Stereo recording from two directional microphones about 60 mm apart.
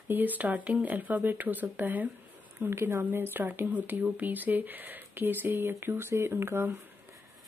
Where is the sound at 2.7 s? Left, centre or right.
Right.